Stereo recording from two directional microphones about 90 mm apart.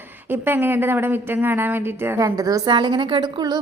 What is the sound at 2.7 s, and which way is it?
Speech, 55° right (ahead or behind).